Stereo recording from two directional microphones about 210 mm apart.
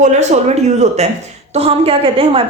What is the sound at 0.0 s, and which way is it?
A woman's voice, 35° right (ahead or behind).